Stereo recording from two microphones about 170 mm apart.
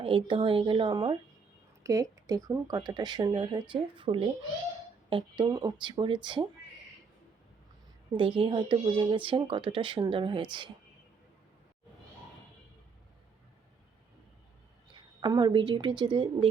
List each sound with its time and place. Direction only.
0.0 s speech: 30° right (ahead or behind)
8.1 s speech: 30° right (ahead or behind)
14.9 s a woman's voice: 25° right (ahead or behind)